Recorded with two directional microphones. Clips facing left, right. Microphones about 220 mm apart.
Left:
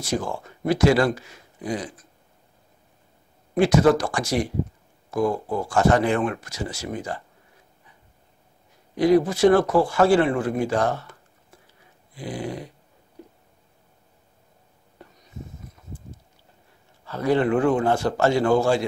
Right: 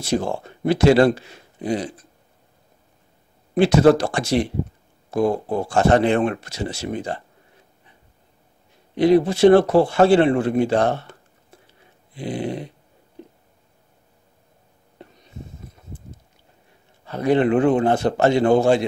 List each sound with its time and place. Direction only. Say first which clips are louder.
0.0 s speech: right 4 dB; 25° right (ahead or behind)
3.5 s speech: right 3 dB; 25° right (ahead or behind)
8.9 s speech: right 2 dB; 25° right (ahead or behind)
15.0 s a sound: right 4 dB; 25° right (ahead or behind)
17.0 s speech: right 3 dB; 20° right (ahead or behind)